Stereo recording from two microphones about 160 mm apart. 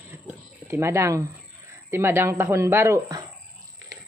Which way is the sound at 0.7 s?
15° right (ahead or behind).